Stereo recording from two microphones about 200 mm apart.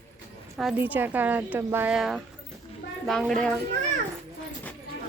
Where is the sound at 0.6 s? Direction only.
5° right (ahead or behind).